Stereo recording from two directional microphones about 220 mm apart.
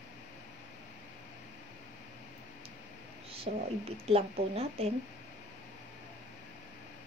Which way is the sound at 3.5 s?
35° right (ahead or behind).